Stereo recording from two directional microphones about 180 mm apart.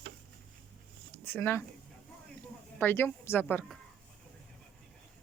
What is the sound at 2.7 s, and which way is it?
Speech, 10° left (ahead or behind).